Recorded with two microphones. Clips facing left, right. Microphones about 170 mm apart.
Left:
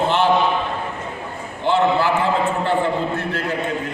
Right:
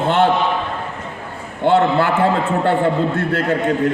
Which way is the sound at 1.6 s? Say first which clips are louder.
Right 3 dB; 55° right (ahead or behind).